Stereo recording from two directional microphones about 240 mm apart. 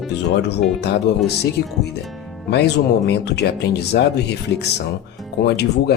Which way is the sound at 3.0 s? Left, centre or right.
Left.